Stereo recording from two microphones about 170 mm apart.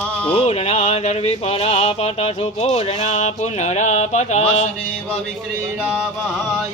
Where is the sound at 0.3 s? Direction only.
35° left (ahead or behind).